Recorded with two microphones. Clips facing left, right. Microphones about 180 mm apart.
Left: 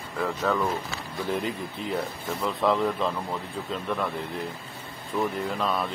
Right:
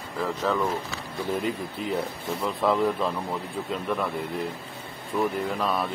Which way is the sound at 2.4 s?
Centre (ahead or behind).